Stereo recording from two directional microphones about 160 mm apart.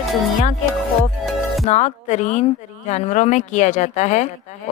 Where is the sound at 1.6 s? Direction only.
45° left (ahead or behind).